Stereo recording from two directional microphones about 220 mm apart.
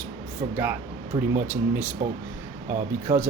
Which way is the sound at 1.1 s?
15° right (ahead or behind).